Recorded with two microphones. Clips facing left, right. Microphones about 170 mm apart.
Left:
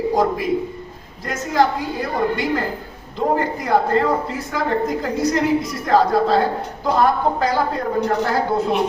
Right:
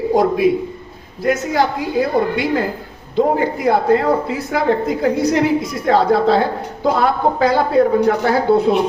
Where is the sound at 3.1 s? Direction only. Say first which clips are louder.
Right 4 dB; 70° right (ahead or behind).